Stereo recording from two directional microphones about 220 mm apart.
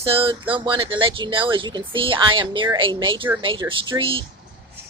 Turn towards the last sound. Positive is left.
turn(degrees=-25)  # may be behind; listen again after turning